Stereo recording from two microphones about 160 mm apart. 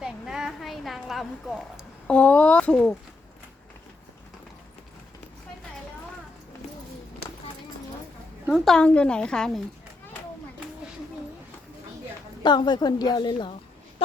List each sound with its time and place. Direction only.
0.0 s a sound: 5° right (ahead or behind)
2.1 s a woman's voice: 10° left (ahead or behind)
8.5 s a woman's voice: 5° left (ahead or behind)
12.4 s a woman's voice: 25° left (ahead or behind)